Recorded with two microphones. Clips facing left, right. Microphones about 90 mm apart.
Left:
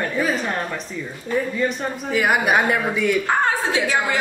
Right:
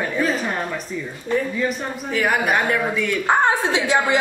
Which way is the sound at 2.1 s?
10° left (ahead or behind).